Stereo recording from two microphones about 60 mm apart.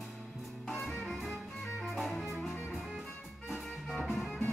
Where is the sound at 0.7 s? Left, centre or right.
Centre.